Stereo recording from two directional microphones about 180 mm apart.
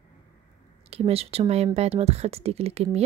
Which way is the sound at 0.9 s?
35° right (ahead or behind).